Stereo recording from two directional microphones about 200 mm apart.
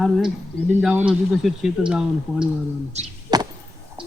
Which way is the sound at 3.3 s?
20° right (ahead or behind).